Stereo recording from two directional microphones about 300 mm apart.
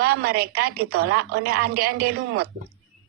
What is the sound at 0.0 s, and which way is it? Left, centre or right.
A woman's voice, right.